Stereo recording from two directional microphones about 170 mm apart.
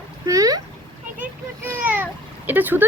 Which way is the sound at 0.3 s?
20° right (ahead or behind).